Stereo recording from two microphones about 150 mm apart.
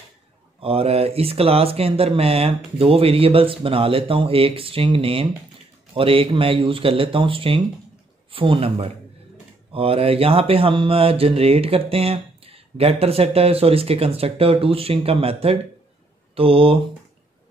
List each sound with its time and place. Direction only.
0.6 s mantra: 40° right (ahead or behind)